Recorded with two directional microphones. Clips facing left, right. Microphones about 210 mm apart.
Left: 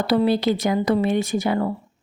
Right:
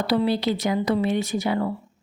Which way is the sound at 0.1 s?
50° left (ahead or behind).